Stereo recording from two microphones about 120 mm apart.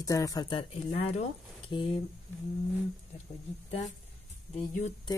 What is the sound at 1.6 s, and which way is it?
Speech, 50° left (ahead or behind).